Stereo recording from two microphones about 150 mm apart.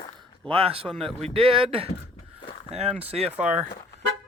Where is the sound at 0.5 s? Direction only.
40° right (ahead or behind).